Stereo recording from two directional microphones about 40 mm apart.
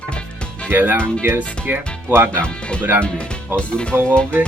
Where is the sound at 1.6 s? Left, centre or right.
Right.